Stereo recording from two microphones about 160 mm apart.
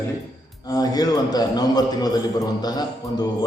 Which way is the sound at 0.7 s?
25° left (ahead or behind).